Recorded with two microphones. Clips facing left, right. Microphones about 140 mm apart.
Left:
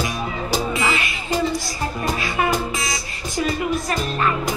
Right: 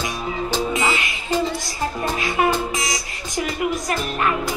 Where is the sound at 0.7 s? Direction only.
20° right (ahead or behind).